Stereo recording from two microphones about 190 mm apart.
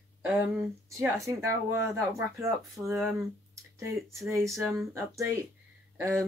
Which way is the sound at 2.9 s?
Centre (ahead or behind).